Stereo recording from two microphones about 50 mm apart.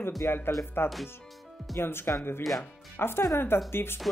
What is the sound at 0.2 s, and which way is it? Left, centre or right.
Speech, left.